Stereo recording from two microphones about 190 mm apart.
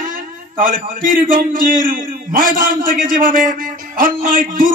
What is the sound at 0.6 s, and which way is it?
A man's voice, 45° right (ahead or behind).